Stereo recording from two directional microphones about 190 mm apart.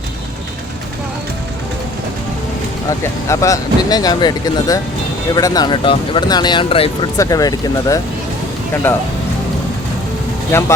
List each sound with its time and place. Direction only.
3.0 s speech: 15° left (ahead or behind)
7.2 s speech: 20° left (ahead or behind)
10.5 s speech: 10° left (ahead or behind)